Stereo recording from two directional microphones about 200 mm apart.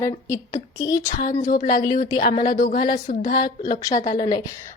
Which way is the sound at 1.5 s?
45° left (ahead or behind).